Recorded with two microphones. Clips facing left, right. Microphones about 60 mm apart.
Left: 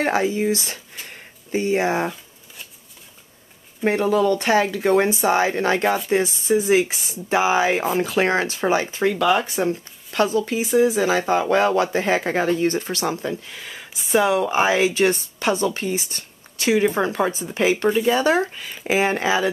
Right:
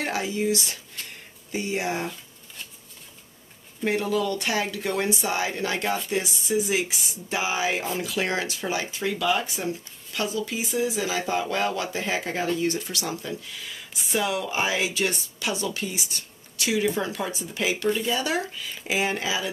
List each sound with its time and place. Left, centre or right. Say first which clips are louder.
0.0 s speech: left 6 dB; left
3.8 s speech: left 6 dB; left